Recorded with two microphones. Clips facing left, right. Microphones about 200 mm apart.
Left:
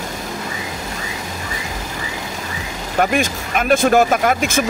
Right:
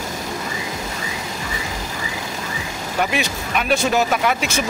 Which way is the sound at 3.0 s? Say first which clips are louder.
Left 5 dB; 50° left (ahead or behind).